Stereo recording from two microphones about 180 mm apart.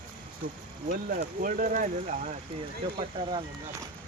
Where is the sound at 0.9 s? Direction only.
50° right (ahead or behind).